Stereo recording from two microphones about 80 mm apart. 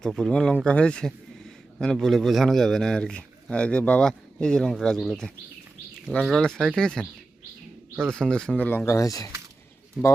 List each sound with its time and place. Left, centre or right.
0.0 s speech: centre
8.0 s speech: centre
8.9 s speech: left
10.0 s speech: centre